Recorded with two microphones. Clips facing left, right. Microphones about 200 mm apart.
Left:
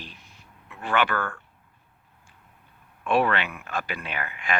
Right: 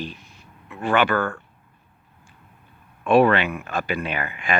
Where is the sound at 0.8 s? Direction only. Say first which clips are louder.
Right 5 dB; 15° right (ahead or behind).